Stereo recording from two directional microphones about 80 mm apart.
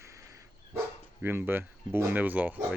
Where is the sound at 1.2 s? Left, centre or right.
Right.